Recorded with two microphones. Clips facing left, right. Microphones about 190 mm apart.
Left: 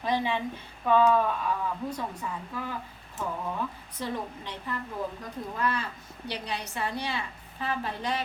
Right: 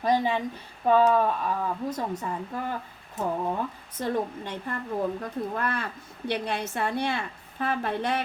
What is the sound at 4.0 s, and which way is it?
A woman's voice, 50° right (ahead or behind).